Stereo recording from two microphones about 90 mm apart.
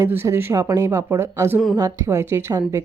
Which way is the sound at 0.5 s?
40° right (ahead or behind).